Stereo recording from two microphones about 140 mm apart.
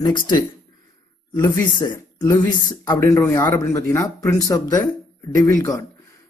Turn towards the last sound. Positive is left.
turn(degrees=25)  # may be behind; listen again after turning